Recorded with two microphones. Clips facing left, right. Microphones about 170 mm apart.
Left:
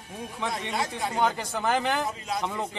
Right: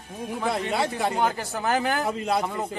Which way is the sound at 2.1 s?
60° right (ahead or behind).